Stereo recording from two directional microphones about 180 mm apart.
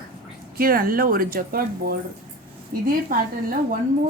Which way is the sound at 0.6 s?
55° right (ahead or behind).